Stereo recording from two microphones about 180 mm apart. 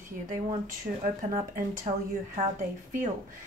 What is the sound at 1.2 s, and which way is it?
Speech, 45° right (ahead or behind).